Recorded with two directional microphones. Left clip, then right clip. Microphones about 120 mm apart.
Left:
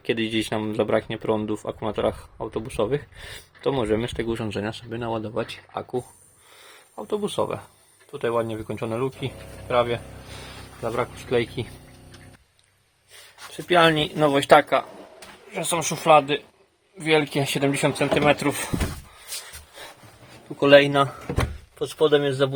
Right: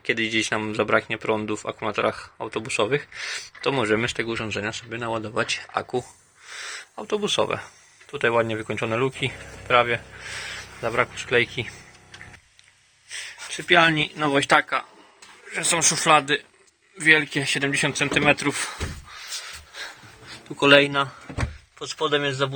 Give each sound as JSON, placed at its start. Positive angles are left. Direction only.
{"t": 0.0, "sound": "speech", "side_deg": 30}
{"t": 4.3, "sound": "speech", "side_deg": 40}
{"t": 5.3, "sound": "speech", "side_deg": 15}
{"t": 7.3, "sound": "speech", "side_deg": 15}
{"t": 8.1, "sound": "speech", "side_deg": 0}
{"t": 11.0, "sound": "speech", "side_deg": 15}
{"t": 13.6, "sound": "speech", "side_deg": 35}
{"t": 20.6, "sound": "speech", "side_deg": 10}
{"t": 21.8, "sound": "speech", "side_deg": 40}